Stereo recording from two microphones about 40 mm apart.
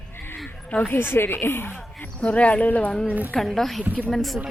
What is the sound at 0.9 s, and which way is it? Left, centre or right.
Speech, left.